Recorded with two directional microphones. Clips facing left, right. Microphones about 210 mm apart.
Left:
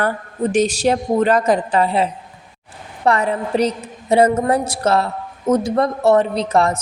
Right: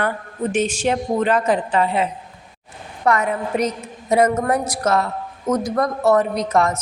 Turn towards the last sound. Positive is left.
turn(degrees=30)  # may be behind; listen again after turning